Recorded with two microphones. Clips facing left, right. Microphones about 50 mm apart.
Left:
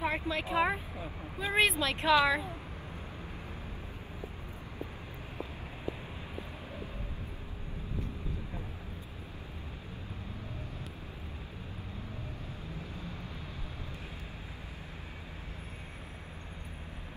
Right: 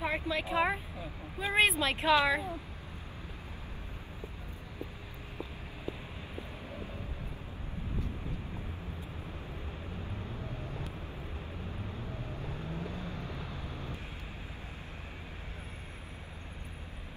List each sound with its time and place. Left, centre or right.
0.0 s speech: centre
12.6 s vehicle: right